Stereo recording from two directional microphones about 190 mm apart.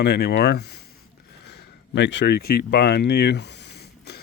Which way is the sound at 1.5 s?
65° left (ahead or behind).